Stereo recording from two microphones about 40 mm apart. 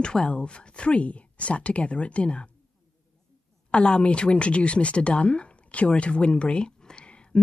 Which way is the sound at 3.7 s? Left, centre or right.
Left.